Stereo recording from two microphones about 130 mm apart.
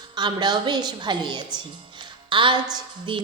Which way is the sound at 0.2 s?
35° right (ahead or behind).